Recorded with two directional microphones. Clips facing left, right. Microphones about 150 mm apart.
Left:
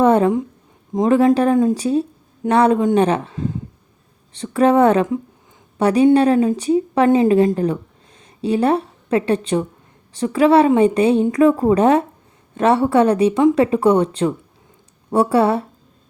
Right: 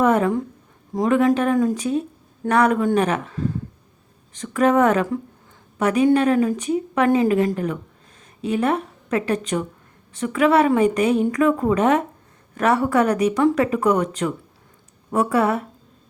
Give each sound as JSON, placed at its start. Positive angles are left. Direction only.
{"t": 0.0, "sound": "a woman's voice", "side_deg": 30}